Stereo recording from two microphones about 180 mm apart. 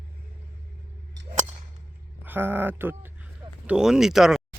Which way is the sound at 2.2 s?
10° right (ahead or behind).